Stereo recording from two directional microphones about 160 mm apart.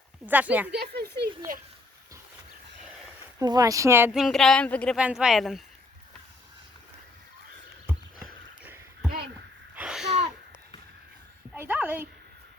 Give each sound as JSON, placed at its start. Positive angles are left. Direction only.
{"t": 0.3, "sound": "speech", "side_deg": -10}
{"t": 0.7, "sound": "speech", "side_deg": -90}
{"t": 3.3, "sound": "speech", "side_deg": -25}
{"t": 4.1, "sound": "speech", "side_deg": 0}
{"t": 4.9, "sound": "speech", "side_deg": -5}
{"t": 7.9, "sound": "horse", "side_deg": -10}
{"t": 9.7, "sound": "a sound", "side_deg": -5}
{"t": 11.5, "sound": "a sound", "side_deg": -15}